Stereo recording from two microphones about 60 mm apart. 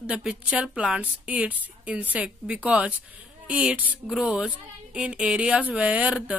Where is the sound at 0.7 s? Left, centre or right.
Right.